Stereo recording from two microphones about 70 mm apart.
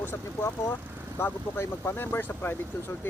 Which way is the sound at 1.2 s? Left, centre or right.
Left.